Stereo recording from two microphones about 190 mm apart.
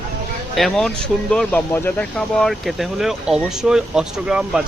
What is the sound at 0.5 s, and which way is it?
Speech, centre (ahead or behind).